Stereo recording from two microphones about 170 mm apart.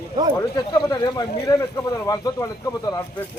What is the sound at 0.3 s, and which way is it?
Speech, 25° left (ahead or behind).